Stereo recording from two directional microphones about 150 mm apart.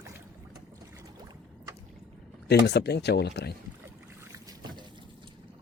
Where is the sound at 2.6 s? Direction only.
90° left.